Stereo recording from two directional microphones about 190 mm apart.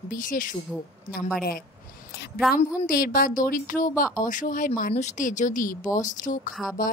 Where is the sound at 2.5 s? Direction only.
50° left (ahead or behind).